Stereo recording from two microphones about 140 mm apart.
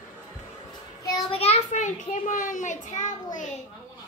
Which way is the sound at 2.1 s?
65° left (ahead or behind).